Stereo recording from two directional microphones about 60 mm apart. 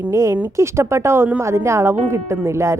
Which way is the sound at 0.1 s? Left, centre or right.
Right.